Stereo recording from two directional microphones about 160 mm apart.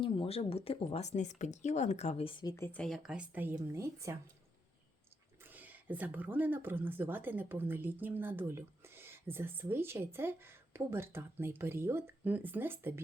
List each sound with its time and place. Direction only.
0.0 s speech: 35° left (ahead or behind)
2.4 s speech: 25° left (ahead or behind)
2.6 s speech: 5° left (ahead or behind)
3.5 s speech: 20° right (ahead or behind)
5.4 s speech: 10° right (ahead or behind)